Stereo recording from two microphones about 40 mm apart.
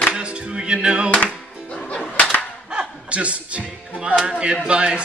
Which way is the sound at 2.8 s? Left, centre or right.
Right.